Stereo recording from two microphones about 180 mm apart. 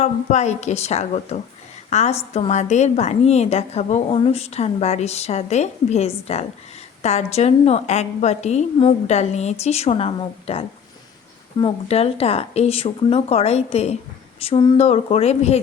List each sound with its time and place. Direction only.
0.0 s a woman's voice: 40° left (ahead or behind)